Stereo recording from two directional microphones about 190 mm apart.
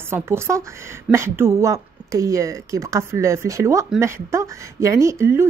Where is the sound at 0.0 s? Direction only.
10° right (ahead or behind).